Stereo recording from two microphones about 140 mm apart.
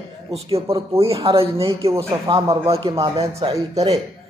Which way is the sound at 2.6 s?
45° right (ahead or behind).